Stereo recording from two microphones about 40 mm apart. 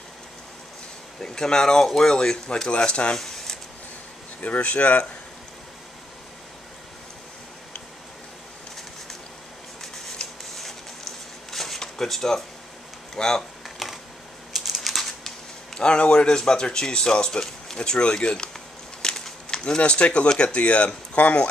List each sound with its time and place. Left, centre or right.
1.2 s speech: centre
3.2 s a sound: centre
4.4 s speech: left
10.6 s a sound: centre
13.1 s speech: centre
14.5 s typing: centre
15.8 s speech: left
19.0 s a sound: centre
19.6 s speech: left